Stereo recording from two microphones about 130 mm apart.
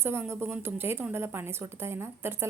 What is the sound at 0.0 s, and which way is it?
A woman's voice, 20° right (ahead or behind).